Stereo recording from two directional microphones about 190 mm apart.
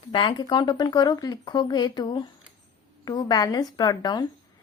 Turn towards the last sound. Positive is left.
turn(degrees=20)  # may be behind; listen again after turning